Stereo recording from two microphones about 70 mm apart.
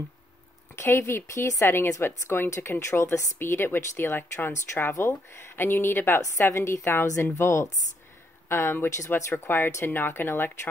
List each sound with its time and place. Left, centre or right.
0.7 s a woman's voice: left